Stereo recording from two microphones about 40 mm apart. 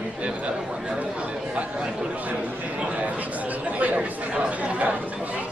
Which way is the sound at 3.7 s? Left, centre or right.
Right.